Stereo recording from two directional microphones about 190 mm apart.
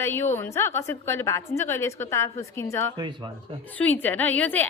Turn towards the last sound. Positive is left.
turn(degrees=10)  # may be behind; listen again after turning